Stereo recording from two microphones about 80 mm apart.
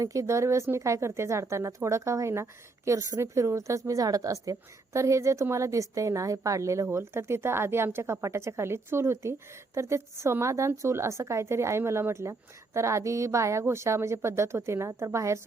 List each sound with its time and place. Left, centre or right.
0.0 s speech: right